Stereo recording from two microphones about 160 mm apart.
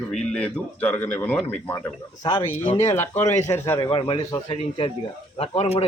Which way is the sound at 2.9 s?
15° left (ahead or behind).